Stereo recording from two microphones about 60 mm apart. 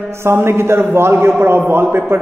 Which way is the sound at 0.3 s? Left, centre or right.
Right.